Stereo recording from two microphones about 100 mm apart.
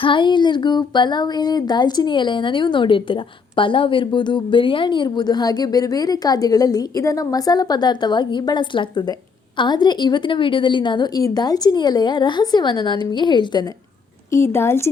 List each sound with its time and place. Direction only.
0.0 s speech: 55° left (ahead or behind)
14.3 s a woman's voice: 25° left (ahead or behind)